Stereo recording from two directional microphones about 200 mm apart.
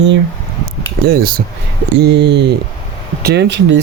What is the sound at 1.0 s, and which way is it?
Speech, 50° right (ahead or behind).